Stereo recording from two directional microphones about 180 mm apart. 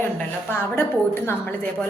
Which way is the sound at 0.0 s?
10° left (ahead or behind).